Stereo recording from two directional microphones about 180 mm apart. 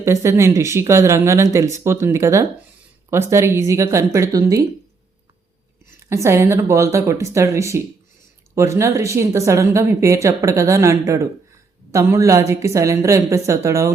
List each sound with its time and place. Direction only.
0.0 s speech: 15° right (ahead or behind)
6.1 s speech: 15° right (ahead or behind)